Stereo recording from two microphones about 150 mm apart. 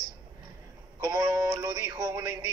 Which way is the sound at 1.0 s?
25° right (ahead or behind).